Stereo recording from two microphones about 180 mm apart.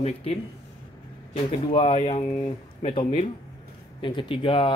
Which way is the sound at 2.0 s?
40° left (ahead or behind).